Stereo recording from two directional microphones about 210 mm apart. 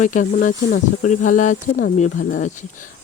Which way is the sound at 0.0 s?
40° left (ahead or behind).